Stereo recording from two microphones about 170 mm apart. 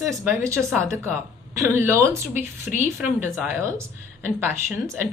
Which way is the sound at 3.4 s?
15° right (ahead or behind).